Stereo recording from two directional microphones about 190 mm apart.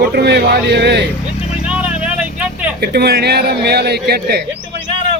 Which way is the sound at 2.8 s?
60° right (ahead or behind).